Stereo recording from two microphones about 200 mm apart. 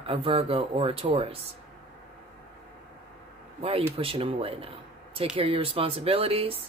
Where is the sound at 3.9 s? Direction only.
25° right (ahead or behind).